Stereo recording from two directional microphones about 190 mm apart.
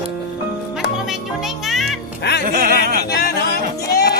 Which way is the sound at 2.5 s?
50° right (ahead or behind).